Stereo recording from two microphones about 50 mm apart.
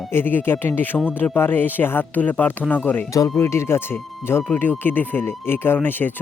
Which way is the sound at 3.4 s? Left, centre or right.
Left.